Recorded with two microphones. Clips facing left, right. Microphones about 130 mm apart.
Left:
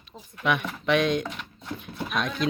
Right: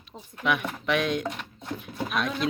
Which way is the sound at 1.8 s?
5° right (ahead or behind).